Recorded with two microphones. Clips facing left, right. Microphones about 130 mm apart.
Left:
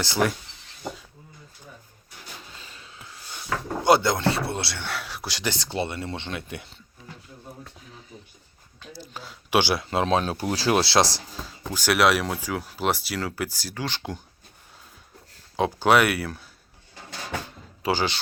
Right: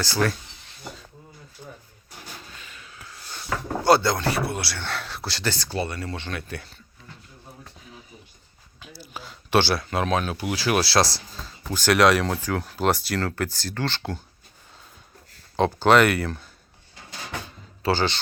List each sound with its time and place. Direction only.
0.0 s speech: 20° left (ahead or behind)
2.5 s a sound: 30° left (ahead or behind)
3.8 s speech: 20° left (ahead or behind)
4.8 s speech: 10° left (ahead or behind)
8.8 s speech: 10° right (ahead or behind)
9.3 s speech: 10° left (ahead or behind)
9.8 s speech: 25° left (ahead or behind)
15.5 s speech: 5° left (ahead or behind)
17.8 s speech: 10° left (ahead or behind)